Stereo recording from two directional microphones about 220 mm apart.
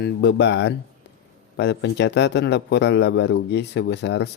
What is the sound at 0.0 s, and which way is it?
Speech, 50° left (ahead or behind).